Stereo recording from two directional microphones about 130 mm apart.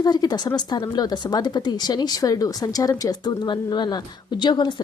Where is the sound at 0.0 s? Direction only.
30° left (ahead or behind).